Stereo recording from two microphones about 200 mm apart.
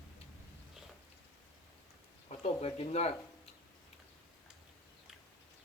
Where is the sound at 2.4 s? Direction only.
30° left (ahead or behind).